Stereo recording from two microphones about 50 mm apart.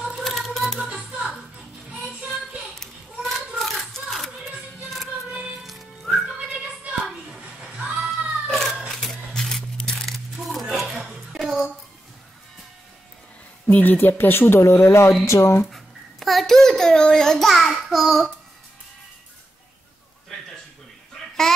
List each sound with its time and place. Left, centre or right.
0.2 s music: centre
0.7 s music: centre
1.9 s child singing: right
2.7 s a sound: centre
4.8 s music: centre
7.7 s cat: centre
8.5 s a sound: centre
11.3 s child singing: centre
13.7 s speech: left
13.9 s speech: left
14.7 s speech: left
15.6 s a sound: centre
17.5 s child singing: centre